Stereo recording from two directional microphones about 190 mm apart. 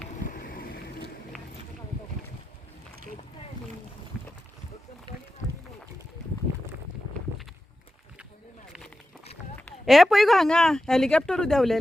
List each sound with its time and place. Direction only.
0.2 s boat: 45° left (ahead or behind)
9.2 s run: 35° left (ahead or behind)
9.6 s speech: 5° left (ahead or behind)